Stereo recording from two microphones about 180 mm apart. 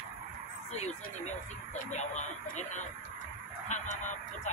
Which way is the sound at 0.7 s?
40° left (ahead or behind).